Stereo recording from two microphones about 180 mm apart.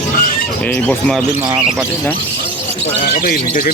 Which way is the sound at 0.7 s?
5° left (ahead or behind).